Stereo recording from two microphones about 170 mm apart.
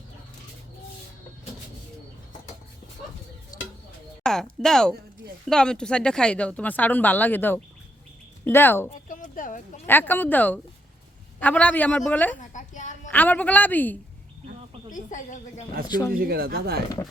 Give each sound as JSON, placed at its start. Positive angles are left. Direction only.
{"t": 3.5, "sound": "bird", "side_deg": 20}
{"t": 4.2, "sound": "a sound", "side_deg": 5}
{"t": 4.6, "sound": "speech", "side_deg": 5}
{"t": 9.0, "sound": "a sound", "side_deg": 50}
{"t": 9.8, "sound": "speech", "side_deg": 10}
{"t": 12.4, "sound": "a sound", "side_deg": 45}
{"t": 13.1, "sound": "speech", "side_deg": 10}
{"t": 14.8, "sound": "a woman's voice", "side_deg": 50}
{"t": 16.1, "sound": "speech", "side_deg": -65}